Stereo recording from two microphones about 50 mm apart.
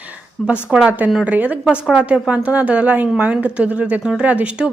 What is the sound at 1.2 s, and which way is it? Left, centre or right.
A woman's voice, right.